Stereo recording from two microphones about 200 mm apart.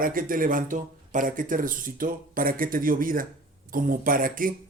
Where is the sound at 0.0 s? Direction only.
45° right (ahead or behind).